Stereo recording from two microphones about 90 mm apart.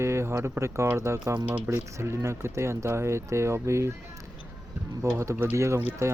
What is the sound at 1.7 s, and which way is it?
Speech, 30° right (ahead or behind).